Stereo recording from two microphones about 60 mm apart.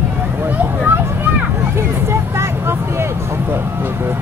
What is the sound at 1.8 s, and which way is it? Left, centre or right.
Vehicle, right.